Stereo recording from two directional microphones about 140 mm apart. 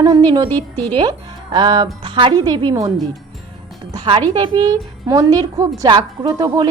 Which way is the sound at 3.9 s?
35° right (ahead or behind).